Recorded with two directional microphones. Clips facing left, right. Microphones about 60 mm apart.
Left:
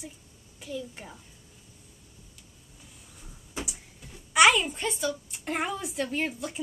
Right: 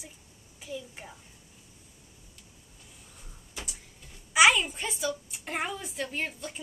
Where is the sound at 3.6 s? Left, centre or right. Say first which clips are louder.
Left 5 dB; centre.